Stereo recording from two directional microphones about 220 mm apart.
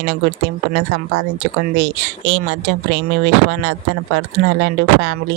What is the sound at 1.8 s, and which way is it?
Speech, 55° right (ahead or behind).